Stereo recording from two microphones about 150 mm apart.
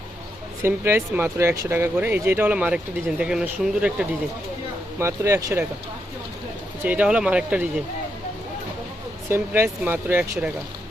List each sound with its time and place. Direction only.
0.6 s speech: 15° right (ahead or behind)
4.9 s speech: 20° right (ahead or behind)
6.8 s speech: 10° right (ahead or behind)
9.3 s speech: 15° right (ahead or behind)